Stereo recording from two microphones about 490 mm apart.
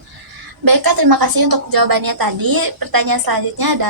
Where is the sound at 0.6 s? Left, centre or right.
Right.